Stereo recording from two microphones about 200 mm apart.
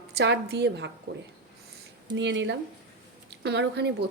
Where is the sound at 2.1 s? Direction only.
65° right (ahead or behind).